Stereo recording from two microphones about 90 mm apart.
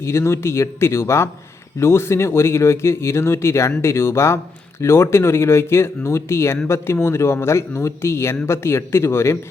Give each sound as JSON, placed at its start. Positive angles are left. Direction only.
{"t": 0.0, "sound": "speech", "side_deg": 30}